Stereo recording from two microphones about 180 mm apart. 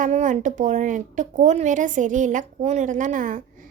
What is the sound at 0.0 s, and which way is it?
A woman's voice, 45° right (ahead or behind).